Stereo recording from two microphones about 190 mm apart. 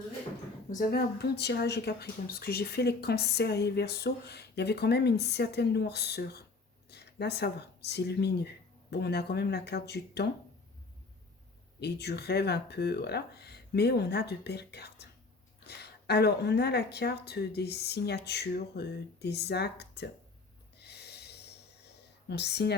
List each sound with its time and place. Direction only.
0.8 s speech: 55° left (ahead or behind)
11.8 s speech: 60° left (ahead or behind)
20.7 s snort: 60° left (ahead or behind)
22.3 s speech: 60° left (ahead or behind)